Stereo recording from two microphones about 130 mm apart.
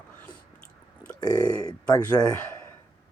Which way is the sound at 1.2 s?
30° left (ahead or behind).